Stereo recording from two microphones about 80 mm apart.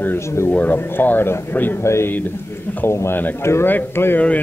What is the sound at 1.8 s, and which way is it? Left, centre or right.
A man's voice, left.